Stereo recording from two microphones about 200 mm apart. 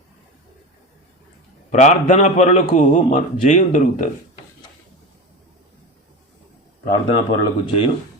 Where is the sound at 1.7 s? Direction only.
35° left (ahead or behind).